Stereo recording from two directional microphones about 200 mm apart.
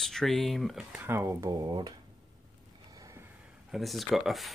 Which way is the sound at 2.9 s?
15° right (ahead or behind).